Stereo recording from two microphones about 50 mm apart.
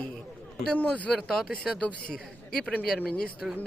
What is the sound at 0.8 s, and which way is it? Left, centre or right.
Speech, left.